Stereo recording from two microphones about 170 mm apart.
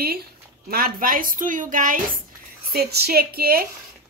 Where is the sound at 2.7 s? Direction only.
65° right (ahead or behind).